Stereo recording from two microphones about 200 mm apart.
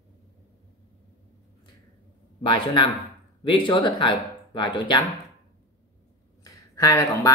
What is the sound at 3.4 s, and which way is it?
Speech, 25° left (ahead or behind).